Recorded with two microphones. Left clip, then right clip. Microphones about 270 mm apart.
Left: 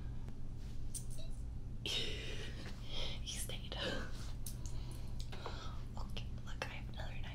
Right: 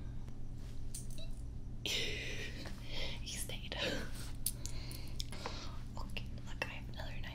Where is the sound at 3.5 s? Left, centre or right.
Centre.